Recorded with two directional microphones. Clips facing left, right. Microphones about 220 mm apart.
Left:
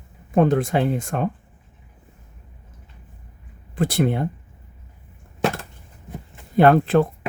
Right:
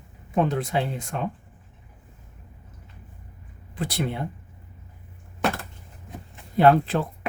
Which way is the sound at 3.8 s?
50° left (ahead or behind).